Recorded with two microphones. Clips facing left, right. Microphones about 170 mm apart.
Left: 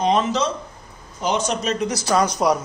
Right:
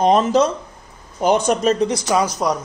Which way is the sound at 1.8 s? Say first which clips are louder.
Right 4 dB; 25° right (ahead or behind).